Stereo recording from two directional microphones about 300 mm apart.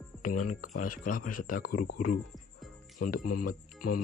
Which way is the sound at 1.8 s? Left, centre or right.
Left.